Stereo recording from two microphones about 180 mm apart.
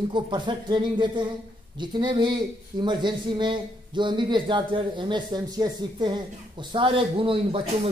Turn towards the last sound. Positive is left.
turn(degrees=-30)  # may be behind; listen again after turning